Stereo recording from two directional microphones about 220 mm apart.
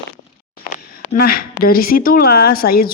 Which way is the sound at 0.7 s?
40° left (ahead or behind).